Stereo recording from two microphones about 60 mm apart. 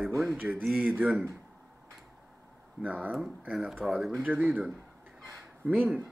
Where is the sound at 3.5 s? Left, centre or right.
Centre.